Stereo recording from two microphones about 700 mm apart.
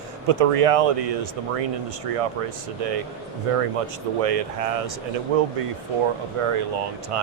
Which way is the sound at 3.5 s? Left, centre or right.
Right.